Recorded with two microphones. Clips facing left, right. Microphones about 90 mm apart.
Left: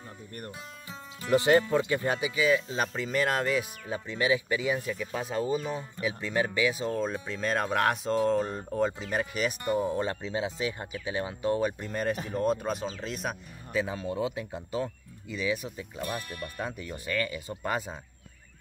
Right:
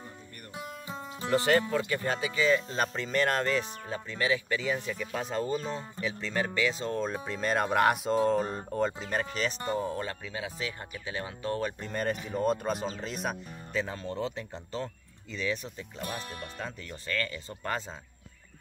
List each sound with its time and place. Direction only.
0.6 s music: 20° right (ahead or behind)
1.3 s speech: 20° left (ahead or behind)
16.1 s speech: 30° right (ahead or behind)
16.5 s speech: 10° left (ahead or behind)